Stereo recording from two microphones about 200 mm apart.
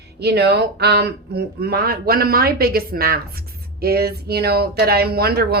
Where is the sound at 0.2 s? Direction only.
55° right (ahead or behind).